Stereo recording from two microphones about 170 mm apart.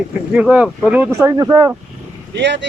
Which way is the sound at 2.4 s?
90° right.